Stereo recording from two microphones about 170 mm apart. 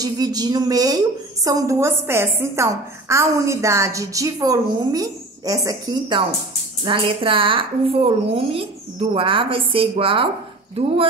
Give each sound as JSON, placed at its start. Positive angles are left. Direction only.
{"t": 0.0, "sound": "a woman's voice", "side_deg": -25}